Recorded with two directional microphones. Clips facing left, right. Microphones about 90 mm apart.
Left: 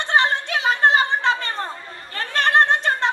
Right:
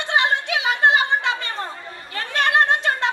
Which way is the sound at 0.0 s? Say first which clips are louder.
Left 1 dB; 35° left (ahead or behind).